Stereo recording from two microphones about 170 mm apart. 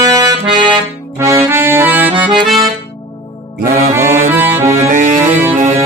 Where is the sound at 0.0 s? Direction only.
20° right (ahead or behind).